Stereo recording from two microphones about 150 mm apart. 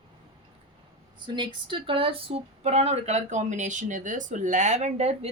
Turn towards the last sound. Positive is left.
turn(degrees=-45)  # may be behind; listen again after turning